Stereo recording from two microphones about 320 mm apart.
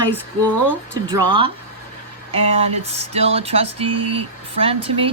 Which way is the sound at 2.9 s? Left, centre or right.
Centre.